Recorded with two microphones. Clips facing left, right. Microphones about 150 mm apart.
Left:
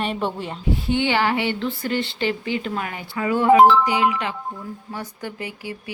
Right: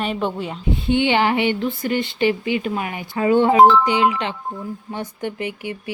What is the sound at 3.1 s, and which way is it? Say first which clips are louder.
Speech: right 1 dB; 30° right (ahead or behind).